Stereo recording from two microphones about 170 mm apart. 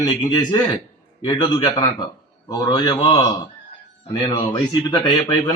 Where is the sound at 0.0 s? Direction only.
25° left (ahead or behind).